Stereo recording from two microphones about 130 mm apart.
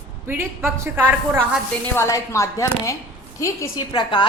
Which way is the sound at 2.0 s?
25° left (ahead or behind).